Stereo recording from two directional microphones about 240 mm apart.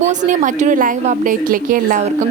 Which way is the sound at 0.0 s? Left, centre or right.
Right.